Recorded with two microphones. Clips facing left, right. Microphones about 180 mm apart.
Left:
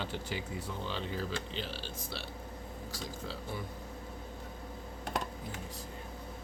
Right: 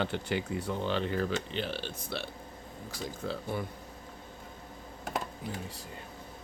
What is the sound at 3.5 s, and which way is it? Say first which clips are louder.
Speech: right 6 dB; 60° right (ahead or behind).